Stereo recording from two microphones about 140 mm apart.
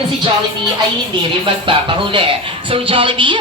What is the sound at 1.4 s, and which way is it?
Speech, 40° right (ahead or behind).